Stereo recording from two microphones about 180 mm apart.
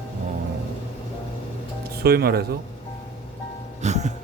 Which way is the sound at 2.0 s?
60° right (ahead or behind).